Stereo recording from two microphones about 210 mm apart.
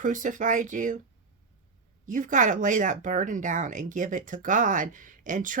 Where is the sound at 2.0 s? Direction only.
40° right (ahead or behind).